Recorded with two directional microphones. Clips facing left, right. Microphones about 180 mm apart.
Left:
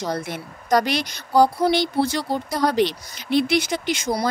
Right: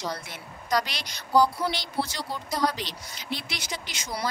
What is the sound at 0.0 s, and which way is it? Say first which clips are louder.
Speech: left 8 dB; 50° left (ahead or behind).